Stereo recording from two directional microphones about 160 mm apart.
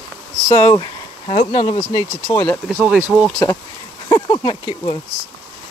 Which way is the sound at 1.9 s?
20° left (ahead or behind).